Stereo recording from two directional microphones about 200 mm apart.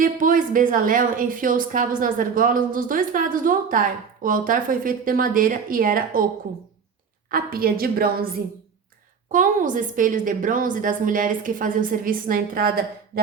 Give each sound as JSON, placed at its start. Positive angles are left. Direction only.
{"t": 0.0, "sound": "speech", "side_deg": -40}
{"t": 7.3, "sound": "a woman's voice", "side_deg": -45}